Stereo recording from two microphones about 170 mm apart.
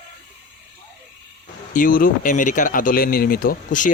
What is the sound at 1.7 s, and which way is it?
Speech, 55° left (ahead or behind).